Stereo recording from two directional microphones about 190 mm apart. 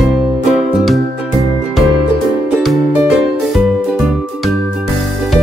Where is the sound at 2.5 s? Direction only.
Centre (ahead or behind).